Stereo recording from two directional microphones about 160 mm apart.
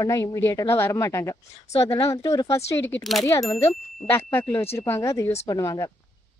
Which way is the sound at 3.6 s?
15° left (ahead or behind).